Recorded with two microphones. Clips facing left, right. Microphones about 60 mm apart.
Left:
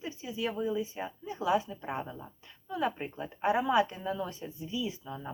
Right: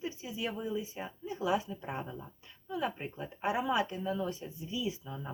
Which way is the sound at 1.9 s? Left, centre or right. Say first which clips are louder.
Left 3 dB; centre.